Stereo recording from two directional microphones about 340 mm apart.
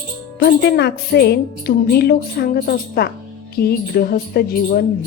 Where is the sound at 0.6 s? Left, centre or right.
Left.